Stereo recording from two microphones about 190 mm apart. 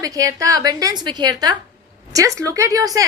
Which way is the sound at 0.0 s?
15° right (ahead or behind).